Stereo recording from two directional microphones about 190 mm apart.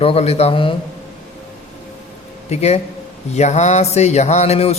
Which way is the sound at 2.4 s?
35° left (ahead or behind).